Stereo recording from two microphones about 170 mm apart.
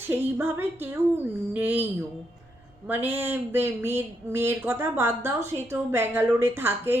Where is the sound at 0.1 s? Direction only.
10° right (ahead or behind).